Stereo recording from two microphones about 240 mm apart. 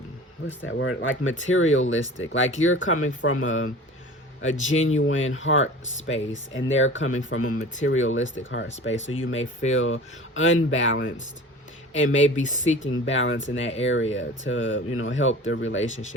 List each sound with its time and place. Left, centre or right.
0.6 s speech: left
12.4 s speech: left
12.7 s speech: left